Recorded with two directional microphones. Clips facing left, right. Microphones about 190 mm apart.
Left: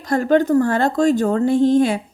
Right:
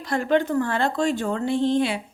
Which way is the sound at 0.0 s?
40° left (ahead or behind).